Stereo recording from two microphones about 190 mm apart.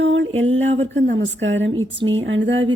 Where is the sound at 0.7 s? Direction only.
35° right (ahead or behind).